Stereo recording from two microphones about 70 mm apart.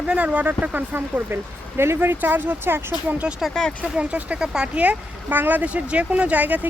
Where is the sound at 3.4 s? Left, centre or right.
Centre.